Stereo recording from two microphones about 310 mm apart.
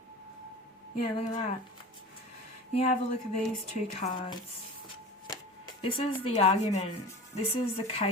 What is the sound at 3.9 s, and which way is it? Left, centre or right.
Speech, left.